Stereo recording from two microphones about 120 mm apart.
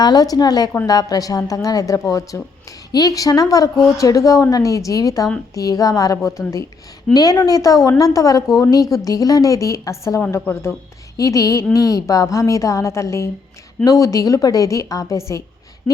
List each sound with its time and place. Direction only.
0.0 s a woman's voice: 35° left (ahead or behind)